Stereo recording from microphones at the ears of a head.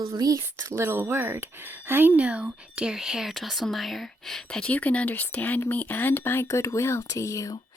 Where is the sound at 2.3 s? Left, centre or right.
Centre.